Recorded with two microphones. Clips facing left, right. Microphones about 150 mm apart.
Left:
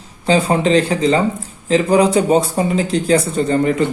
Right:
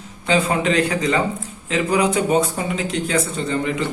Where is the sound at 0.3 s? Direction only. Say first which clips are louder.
Left 5 dB; 35° left (ahead or behind).